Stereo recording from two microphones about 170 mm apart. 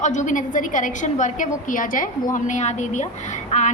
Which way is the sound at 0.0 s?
45° left (ahead or behind).